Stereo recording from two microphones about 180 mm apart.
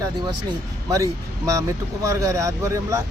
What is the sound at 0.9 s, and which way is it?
Speech, 20° right (ahead or behind).